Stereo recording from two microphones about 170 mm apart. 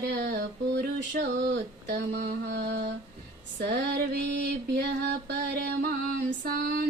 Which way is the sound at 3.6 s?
75° right (ahead or behind).